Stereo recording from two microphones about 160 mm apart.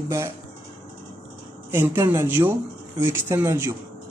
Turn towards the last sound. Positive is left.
turn(degrees=-15)  # may be behind; listen again after turning